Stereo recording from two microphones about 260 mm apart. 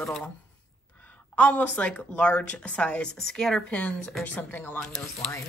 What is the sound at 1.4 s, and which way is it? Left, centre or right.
Speech, centre.